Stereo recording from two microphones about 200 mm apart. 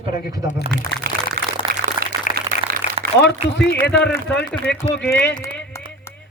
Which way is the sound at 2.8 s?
35° left (ahead or behind).